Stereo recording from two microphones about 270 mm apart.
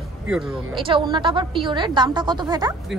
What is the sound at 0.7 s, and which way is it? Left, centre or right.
A woman's voice, centre.